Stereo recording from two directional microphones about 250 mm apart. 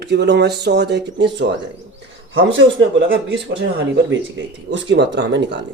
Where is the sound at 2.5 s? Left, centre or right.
Right.